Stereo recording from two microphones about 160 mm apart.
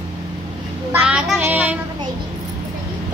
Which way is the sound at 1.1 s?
10° right (ahead or behind).